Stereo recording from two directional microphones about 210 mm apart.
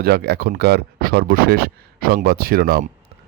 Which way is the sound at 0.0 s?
50° right (ahead or behind).